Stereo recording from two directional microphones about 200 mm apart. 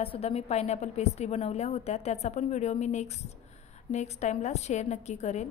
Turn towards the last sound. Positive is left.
turn(degrees=35)  # may be behind; listen again after turning